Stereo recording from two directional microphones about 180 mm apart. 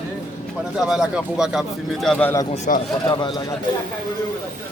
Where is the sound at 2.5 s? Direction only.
40° left (ahead or behind).